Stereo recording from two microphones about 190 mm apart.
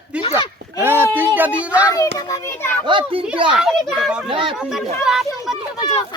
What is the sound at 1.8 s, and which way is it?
Speech, 15° left (ahead or behind).